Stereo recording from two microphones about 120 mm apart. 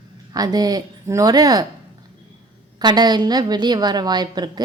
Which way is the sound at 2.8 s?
35° right (ahead or behind).